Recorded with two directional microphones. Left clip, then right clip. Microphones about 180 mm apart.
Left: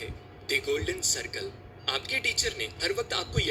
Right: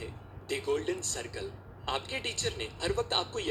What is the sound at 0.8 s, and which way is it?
A man's voice, 40° left (ahead or behind).